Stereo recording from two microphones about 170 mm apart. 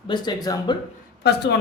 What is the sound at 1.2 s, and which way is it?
Speech, 75° left (ahead or behind).